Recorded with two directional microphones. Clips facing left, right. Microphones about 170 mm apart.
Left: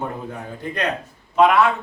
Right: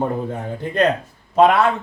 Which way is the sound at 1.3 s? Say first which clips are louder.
Right 2 dB; 35° right (ahead or behind).